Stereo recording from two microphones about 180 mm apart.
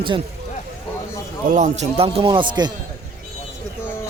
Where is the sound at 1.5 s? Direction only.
40° right (ahead or behind); by 2.7 s 25° right (ahead or behind).